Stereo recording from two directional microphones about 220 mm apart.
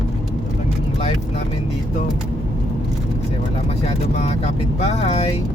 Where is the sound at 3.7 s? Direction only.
30° left (ahead or behind).